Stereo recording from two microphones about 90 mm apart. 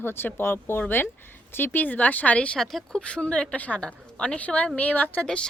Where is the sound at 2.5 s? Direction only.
5° left (ahead or behind); by 5.2 s 20° left (ahead or behind).